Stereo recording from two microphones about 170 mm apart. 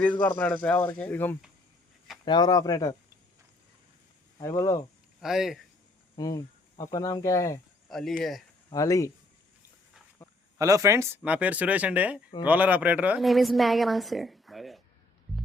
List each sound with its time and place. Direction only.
0.2 s speech: 10° left (ahead or behind)
2.2 s speech: 25° left (ahead or behind)
4.4 s speech: 20° left (ahead or behind)
5.2 s a woman's voice: centre (ahead or behind)
6.1 s speech: 20° left (ahead or behind)
7.9 s a woman's voice: centre (ahead or behind)
8.7 s speech: 20° left (ahead or behind)
10.6 s a woman's voice: 20° right (ahead or behind); by 14.8 s centre (ahead or behind)